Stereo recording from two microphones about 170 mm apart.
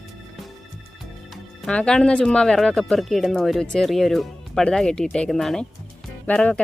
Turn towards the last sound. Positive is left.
turn(degrees=5)  # may be behind; listen again after turning